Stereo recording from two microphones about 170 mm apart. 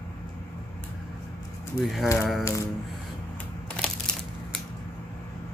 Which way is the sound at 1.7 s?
15° left (ahead or behind).